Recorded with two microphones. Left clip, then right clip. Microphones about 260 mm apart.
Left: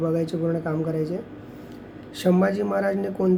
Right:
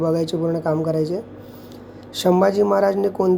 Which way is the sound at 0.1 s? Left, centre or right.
Centre.